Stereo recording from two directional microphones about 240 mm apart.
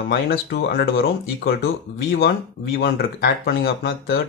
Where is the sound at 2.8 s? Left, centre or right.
Left.